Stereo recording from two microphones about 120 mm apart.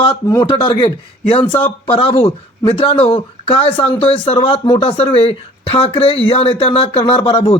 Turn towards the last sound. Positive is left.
turn(degrees=50)  # may be behind; listen again after turning